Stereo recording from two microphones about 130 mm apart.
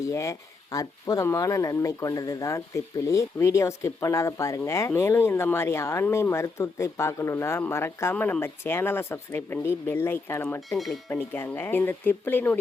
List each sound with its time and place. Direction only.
0.0 s speech: 25° left (ahead or behind)
10.7 s speech: centre (ahead or behind)
11.1 s speech: 15° left (ahead or behind)